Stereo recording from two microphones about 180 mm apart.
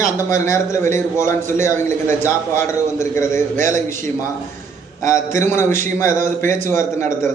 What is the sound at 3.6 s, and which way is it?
Speech, 45° right (ahead or behind).